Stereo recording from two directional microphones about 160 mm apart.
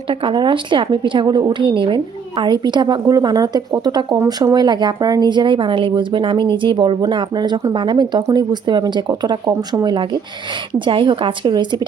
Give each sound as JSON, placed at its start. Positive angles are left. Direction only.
{"t": 0.1, "sound": "a woman's voice", "side_deg": -30}